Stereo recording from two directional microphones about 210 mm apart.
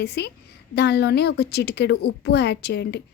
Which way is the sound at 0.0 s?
50° left (ahead or behind).